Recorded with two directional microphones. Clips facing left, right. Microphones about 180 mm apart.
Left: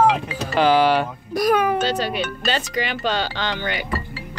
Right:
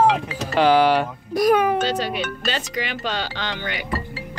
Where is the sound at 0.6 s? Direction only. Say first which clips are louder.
Even; 15° right (ahead or behind).